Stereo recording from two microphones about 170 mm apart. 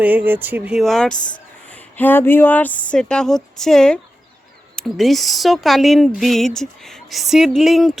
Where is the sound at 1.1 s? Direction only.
50° left (ahead or behind).